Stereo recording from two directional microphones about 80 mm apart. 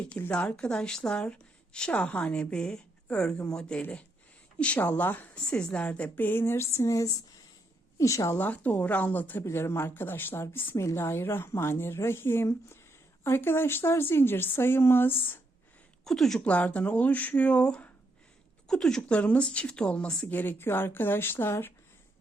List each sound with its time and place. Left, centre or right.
0.1 s a woman's voice: centre
5.4 s a woman's voice: centre; by 8.4 s left
8.4 s a woman's voice: left
16.0 s a woman's voice: centre
16.4 s a woman's voice: centre; by 21.7 s left